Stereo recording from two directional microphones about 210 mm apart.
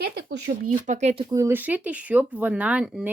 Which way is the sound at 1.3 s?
10° right (ahead or behind).